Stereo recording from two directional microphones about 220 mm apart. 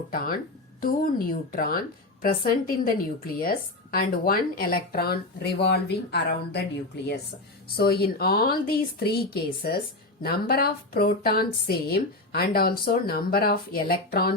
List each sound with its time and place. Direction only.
0.8 s a woman's voice: 40° left (ahead or behind)